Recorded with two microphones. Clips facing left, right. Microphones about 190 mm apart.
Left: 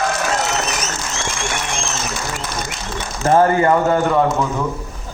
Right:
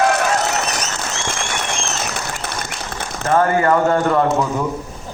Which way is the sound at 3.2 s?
25° left (ahead or behind).